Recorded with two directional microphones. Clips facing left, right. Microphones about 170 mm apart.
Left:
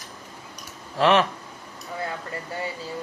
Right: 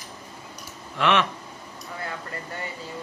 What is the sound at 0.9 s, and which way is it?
Speech, 35° left (ahead or behind).